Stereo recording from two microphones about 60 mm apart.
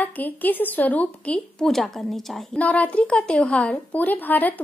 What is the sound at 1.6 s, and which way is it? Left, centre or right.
Speech, centre.